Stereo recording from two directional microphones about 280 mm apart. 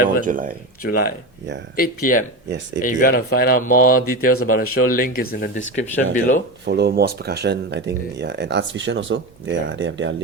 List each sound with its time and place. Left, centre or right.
0.3 s speech: right
0.8 s speech: left
5.7 s speech: left
6.7 s speech: right